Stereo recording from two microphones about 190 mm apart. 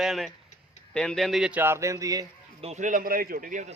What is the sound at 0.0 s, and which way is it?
A man's voice, centre (ahead or behind).